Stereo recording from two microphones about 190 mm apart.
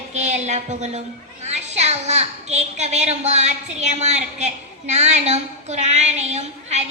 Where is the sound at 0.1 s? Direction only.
35° right (ahead or behind).